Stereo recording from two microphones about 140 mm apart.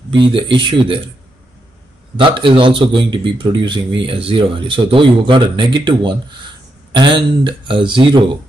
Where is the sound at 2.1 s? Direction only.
35° right (ahead or behind).